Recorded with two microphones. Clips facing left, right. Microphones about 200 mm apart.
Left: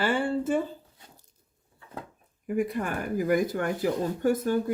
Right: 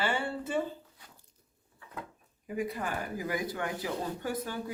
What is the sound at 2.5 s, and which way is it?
Speech, 50° left (ahead or behind).